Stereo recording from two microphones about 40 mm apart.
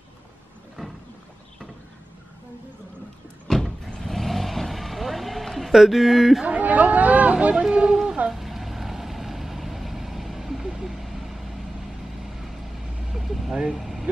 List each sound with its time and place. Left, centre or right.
0.8 s a sound: centre
3.4 s vehicle: centre
5.7 s speech: centre
6.4 s chatter: right
7.7 s a sound: centre
8.3 s vehicle: centre
13.1 s vehicle: centre
13.5 s vehicle: centre
13.7 s vehicle: centre